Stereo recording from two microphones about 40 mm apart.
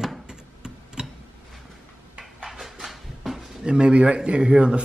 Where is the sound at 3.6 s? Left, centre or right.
Right.